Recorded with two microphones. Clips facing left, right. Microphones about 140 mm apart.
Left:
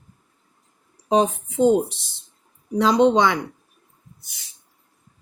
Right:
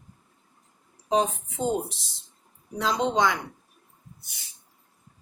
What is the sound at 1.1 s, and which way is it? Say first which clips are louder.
Speech: left 5 dB; 80° left.